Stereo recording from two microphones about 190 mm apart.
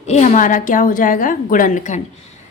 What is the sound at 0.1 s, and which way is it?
A woman's voice, 40° left (ahead or behind).